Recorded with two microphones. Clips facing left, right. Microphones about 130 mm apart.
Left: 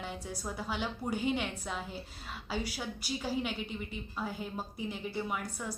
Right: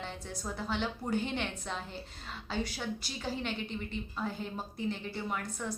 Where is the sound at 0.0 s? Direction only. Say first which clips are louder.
Left 1 dB; 10° left (ahead or behind).